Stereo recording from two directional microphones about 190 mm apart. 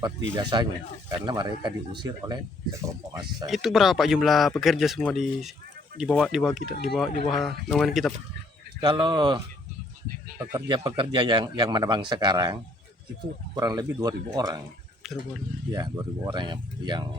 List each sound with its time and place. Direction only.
0.3 s speech: 20° right (ahead or behind)
3.4 s a man's voice: centre (ahead or behind)
6.6 s speech: 55° left (ahead or behind)
6.8 s a man's voice: centre (ahead or behind)
8.8 s speech: 25° right (ahead or behind)
13.6 s speech: 20° right (ahead or behind)
15.0 s a sound: centre (ahead or behind)
15.7 s speech: 20° right (ahead or behind)